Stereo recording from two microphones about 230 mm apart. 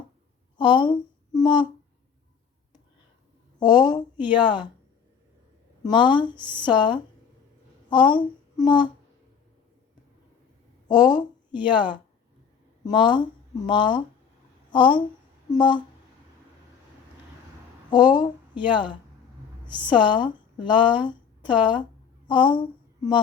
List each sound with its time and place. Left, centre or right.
0.6 s speech: left
3.6 s speech: centre
5.8 s a woman's voice: left
10.8 s speech: centre
17.9 s speech: centre